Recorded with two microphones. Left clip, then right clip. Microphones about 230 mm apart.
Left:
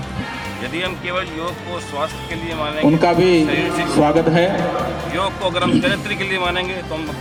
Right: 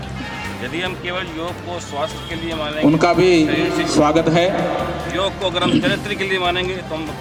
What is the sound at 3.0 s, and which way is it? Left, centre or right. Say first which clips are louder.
Speech: right 1 dB; right.